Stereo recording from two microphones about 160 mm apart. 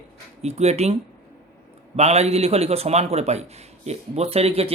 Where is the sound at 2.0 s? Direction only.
40° right (ahead or behind).